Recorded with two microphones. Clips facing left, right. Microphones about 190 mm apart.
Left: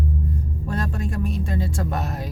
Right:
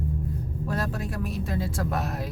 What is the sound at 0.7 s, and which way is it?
Speech, 5° right (ahead or behind).